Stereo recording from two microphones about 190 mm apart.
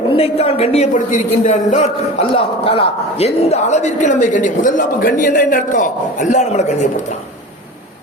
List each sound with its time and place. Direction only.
0.2 s a man's voice: 30° left (ahead or behind)